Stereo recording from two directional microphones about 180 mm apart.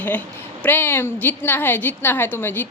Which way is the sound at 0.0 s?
10° left (ahead or behind).